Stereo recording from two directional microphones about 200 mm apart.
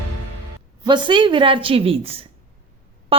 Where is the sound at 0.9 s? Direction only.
25° right (ahead or behind).